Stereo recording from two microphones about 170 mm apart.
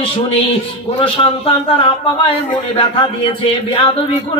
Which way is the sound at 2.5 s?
25° left (ahead or behind).